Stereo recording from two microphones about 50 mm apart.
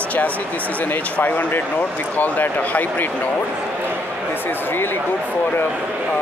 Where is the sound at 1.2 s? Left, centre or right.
Left.